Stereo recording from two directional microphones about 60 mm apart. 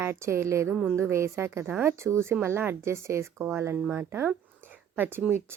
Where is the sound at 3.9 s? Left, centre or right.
Right.